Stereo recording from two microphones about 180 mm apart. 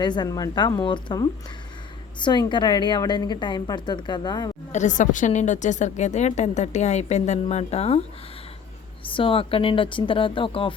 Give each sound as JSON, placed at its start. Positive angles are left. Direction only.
{"t": 0.0, "sound": "a woman's voice", "side_deg": 25}
{"t": 4.7, "sound": "a woman's voice", "side_deg": 45}
{"t": 9.0, "sound": "a woman's voice", "side_deg": 30}